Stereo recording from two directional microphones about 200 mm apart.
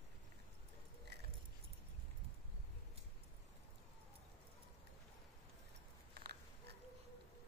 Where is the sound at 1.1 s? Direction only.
55° right (ahead or behind).